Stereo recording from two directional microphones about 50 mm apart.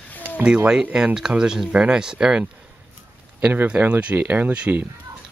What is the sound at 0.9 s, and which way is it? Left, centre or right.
Speech, centre.